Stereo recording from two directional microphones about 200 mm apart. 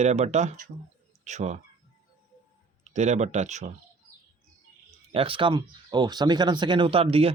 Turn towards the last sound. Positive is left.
turn(degrees=-30)  # may be behind; listen again after turning